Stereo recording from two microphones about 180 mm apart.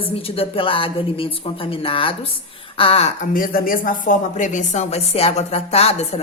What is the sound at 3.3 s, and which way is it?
Speech, 50° left (ahead or behind).